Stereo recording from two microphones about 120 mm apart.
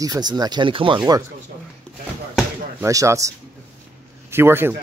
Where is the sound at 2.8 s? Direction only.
25° right (ahead or behind).